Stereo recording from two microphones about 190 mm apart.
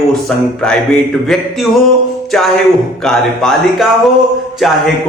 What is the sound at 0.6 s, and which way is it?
A man's voice, 5° left (ahead or behind).